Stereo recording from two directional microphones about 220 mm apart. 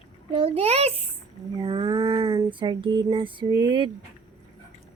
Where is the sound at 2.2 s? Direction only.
25° right (ahead or behind).